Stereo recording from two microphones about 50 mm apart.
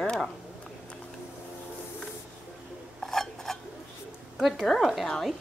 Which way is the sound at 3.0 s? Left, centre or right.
Centre.